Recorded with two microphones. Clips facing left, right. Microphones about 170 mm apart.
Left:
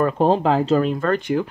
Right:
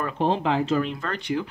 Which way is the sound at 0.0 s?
40° left (ahead or behind).